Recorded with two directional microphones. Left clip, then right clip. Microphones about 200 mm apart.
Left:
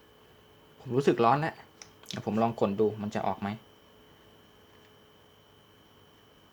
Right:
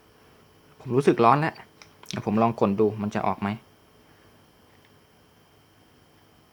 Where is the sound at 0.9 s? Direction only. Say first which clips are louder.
Right 5 dB; 10° right (ahead or behind).